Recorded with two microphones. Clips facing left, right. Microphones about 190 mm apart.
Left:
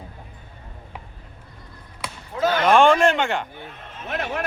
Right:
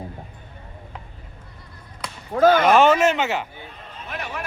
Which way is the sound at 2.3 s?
50° right (ahead or behind).